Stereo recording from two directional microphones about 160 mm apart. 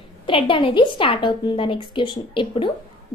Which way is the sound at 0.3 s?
35° left (ahead or behind).